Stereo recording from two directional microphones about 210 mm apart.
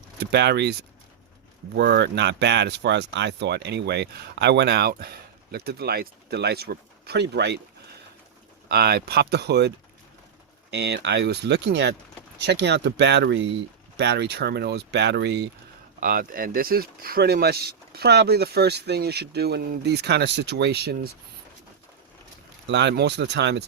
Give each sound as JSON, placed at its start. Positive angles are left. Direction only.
{"t": 0.2, "sound": "speech", "side_deg": -50}
{"t": 8.7, "sound": "speech", "side_deg": -50}
{"t": 16.0, "sound": "speech", "side_deg": -45}
{"t": 22.6, "sound": "speech", "side_deg": -55}